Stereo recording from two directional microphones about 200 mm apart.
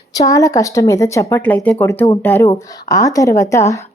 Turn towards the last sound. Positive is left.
turn(degrees=15)  # may be behind; listen again after turning